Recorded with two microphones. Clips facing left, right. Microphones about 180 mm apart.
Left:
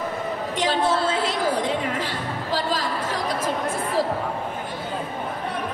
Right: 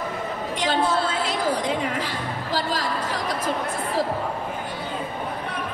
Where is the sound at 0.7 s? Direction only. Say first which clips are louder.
Left 1 dB; 40° left (ahead or behind).